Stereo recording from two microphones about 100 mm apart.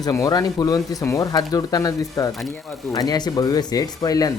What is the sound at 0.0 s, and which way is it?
Speech, 35° left (ahead or behind).